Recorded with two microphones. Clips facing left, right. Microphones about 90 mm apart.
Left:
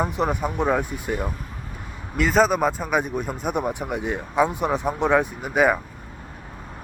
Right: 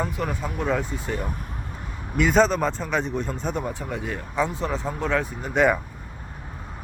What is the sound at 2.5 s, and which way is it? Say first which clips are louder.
Speech: left 3 dB; 10° left (ahead or behind).